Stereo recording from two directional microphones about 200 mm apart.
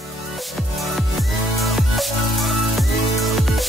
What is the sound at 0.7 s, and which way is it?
Music, centre (ahead or behind).